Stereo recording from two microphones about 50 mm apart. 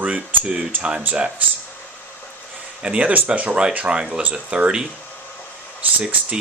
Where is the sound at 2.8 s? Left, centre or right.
Right.